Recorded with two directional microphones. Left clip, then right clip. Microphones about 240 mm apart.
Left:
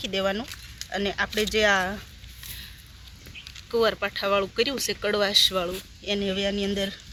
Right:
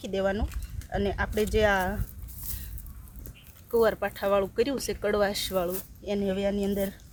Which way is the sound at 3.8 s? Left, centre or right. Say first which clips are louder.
Left 1 dB; right.